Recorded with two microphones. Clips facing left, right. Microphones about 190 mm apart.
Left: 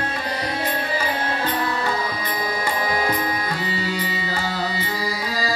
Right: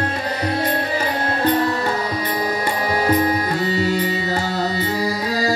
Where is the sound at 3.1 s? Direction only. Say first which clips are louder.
Right 6 dB; 35° right (ahead or behind).